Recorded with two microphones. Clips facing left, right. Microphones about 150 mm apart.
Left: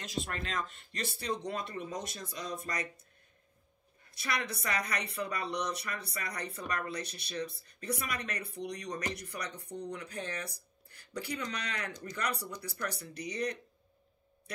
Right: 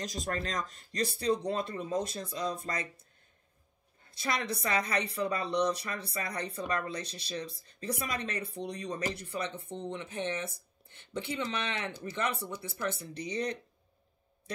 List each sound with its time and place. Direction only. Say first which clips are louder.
0.0 s speech: right 3 dB; 40° right (ahead or behind)
4.1 s speech: right 3 dB; 30° right (ahead or behind)